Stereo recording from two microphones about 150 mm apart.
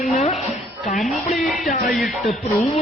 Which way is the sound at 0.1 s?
45° left (ahead or behind).